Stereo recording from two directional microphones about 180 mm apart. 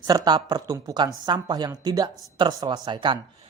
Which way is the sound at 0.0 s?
20° right (ahead or behind).